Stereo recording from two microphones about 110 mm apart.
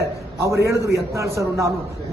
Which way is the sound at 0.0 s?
25° right (ahead or behind).